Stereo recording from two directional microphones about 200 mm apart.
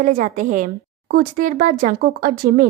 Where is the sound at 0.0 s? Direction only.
40° right (ahead or behind).